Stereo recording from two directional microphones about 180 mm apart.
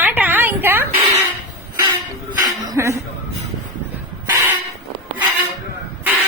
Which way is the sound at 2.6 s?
20° right (ahead or behind).